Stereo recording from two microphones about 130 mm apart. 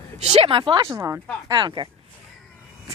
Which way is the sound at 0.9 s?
20° right (ahead or behind).